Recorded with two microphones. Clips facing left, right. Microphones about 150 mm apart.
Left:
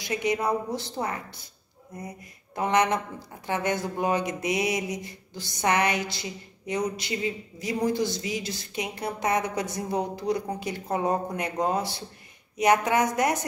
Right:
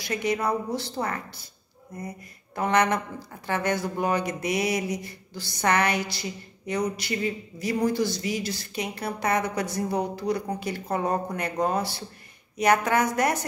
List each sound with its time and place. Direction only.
0.0 s speech: 20° left (ahead or behind)